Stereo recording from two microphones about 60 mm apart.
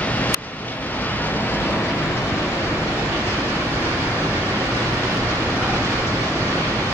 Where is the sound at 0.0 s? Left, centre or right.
Left.